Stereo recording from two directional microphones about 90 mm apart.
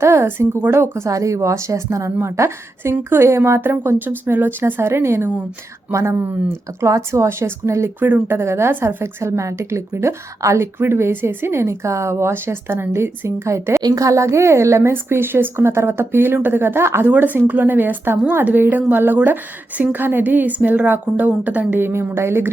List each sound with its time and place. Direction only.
0.0 s speech: 30° right (ahead or behind)
7.9 s speech: 20° right (ahead or behind)